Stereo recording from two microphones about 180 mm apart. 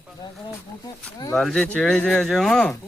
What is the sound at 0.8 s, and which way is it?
Speech, 20° left (ahead or behind).